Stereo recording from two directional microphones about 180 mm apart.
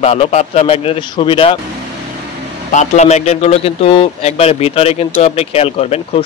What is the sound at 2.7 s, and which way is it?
A man's voice, 40° left (ahead or behind).